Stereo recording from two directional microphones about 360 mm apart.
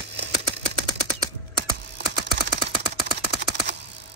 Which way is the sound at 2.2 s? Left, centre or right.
Right.